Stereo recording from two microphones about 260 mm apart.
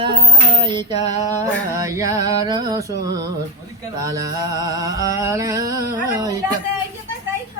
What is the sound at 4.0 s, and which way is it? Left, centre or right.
Music, centre.